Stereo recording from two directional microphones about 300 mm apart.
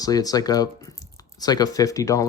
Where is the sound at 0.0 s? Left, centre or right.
Centre.